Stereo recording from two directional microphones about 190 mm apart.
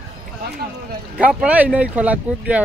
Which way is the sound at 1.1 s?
5° right (ahead or behind).